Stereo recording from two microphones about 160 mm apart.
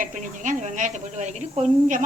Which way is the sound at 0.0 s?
50° right (ahead or behind).